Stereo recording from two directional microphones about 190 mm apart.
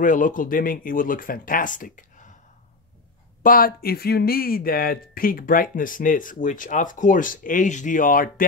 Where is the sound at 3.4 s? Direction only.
50° left (ahead or behind).